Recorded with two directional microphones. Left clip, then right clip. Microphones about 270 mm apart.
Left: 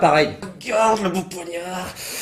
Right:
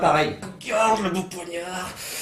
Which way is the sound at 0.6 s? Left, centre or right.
Left.